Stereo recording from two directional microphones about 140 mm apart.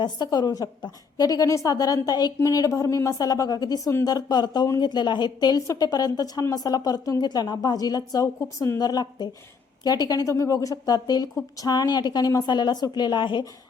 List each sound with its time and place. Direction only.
0.0 s a woman's voice: 30° left (ahead or behind)